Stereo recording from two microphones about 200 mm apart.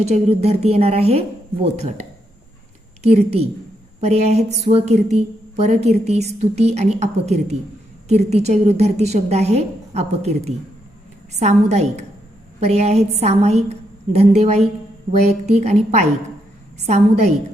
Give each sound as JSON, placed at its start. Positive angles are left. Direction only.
{"t": 0.0, "sound": "a woman's voice", "side_deg": -30}
{"t": 3.0, "sound": "a woman's voice", "side_deg": -30}